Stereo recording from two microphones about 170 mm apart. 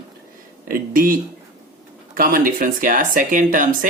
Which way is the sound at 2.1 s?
55° right (ahead or behind).